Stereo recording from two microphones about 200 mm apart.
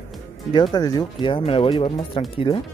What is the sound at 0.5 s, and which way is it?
Speech, 20° left (ahead or behind).